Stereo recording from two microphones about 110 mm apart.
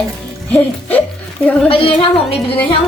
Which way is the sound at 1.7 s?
55° left (ahead or behind).